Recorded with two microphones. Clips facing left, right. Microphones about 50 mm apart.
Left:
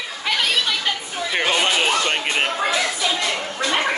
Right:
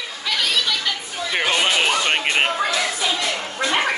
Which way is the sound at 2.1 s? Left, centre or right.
Centre.